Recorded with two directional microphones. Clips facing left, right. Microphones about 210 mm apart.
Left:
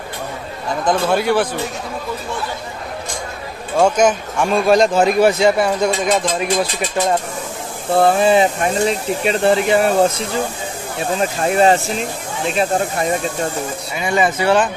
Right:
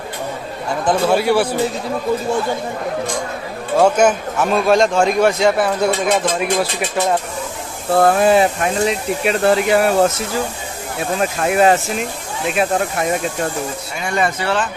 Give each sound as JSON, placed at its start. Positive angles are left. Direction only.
{"t": 0.8, "sound": "speech", "side_deg": -5}
{"t": 3.7, "sound": "a man's voice", "side_deg": -5}
{"t": 5.9, "sound": "speech", "side_deg": -60}
{"t": 8.0, "sound": "a man's voice", "side_deg": 0}
{"t": 11.4, "sound": "a man's voice", "side_deg": -5}
{"t": 14.0, "sound": "a man's voice", "side_deg": 0}
{"t": 14.4, "sound": "speech", "side_deg": 15}